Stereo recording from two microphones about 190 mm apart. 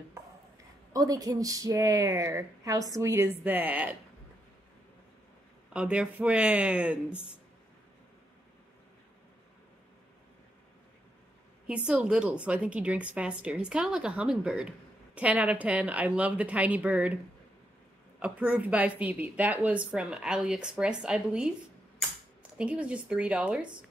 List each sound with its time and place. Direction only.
0.9 s speech: 20° right (ahead or behind)
5.7 s speech: 5° right (ahead or behind)
11.6 s a woman's voice: 5° right (ahead or behind)
18.2 s a woman's voice: 10° right (ahead or behind)